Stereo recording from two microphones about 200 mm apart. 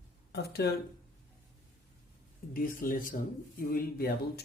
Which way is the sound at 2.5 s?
45° left (ahead or behind).